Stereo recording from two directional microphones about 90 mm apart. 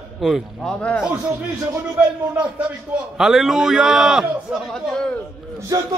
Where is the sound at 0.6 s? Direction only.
15° left (ahead or behind).